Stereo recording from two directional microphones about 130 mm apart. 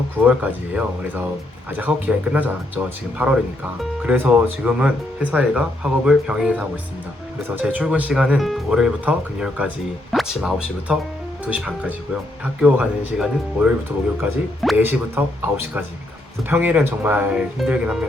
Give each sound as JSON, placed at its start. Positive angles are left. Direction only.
{"t": 0.2, "sound": "speech", "side_deg": -10}
{"t": 14.8, "sound": "speech", "side_deg": -15}